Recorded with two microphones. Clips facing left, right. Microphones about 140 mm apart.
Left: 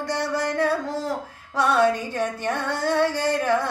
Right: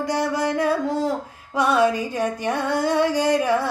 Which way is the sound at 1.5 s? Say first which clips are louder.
Right 1 dB; 10° right (ahead or behind).